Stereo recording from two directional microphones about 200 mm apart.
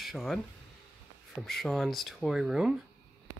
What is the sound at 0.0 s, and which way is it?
Speech, centre (ahead or behind).